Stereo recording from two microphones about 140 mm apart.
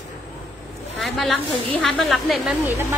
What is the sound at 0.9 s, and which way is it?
A woman's voice, centre (ahead or behind).